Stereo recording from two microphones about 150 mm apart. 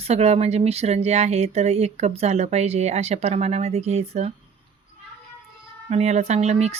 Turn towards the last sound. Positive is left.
turn(degrees=-45)  # may be behind; listen again after turning